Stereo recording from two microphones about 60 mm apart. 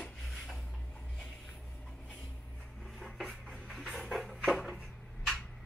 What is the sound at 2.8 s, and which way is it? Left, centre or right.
Dishes, centre.